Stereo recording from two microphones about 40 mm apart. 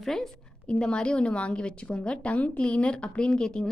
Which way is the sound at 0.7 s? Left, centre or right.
Left.